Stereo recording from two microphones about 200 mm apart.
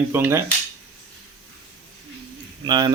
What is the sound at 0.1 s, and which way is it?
Speech, 10° right (ahead or behind).